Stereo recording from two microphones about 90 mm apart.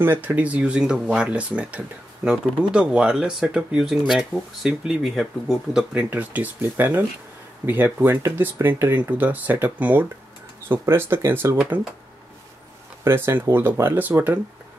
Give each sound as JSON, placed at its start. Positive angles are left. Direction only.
{"t": 0.0, "sound": "speech", "side_deg": -25}
{"t": 6.0, "sound": "speech", "side_deg": -20}
{"t": 11.7, "sound": "speech", "side_deg": -15}
{"t": 13.0, "sound": "speech", "side_deg": -25}